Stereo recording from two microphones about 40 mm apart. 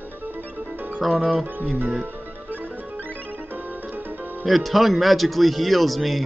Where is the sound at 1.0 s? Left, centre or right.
Centre.